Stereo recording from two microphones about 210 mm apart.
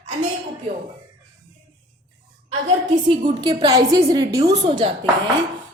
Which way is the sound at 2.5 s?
30° right (ahead or behind).